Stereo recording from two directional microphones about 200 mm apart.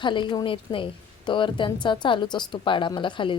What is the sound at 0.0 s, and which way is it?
A woman's voice, 25° left (ahead or behind).